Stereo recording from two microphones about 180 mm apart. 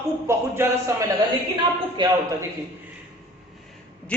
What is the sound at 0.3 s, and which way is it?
Speech, 15° right (ahead or behind).